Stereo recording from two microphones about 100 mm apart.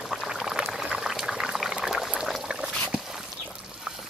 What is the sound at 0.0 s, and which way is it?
Boiling, 5° right (ahead or behind).